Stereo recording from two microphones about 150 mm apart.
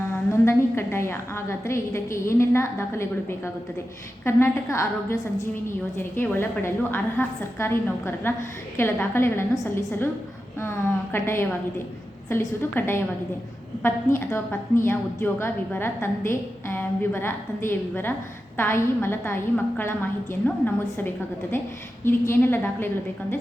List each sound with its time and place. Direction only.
0.4 s a woman's voice: 15° left (ahead or behind)
22.0 s a woman's voice: 15° left (ahead or behind)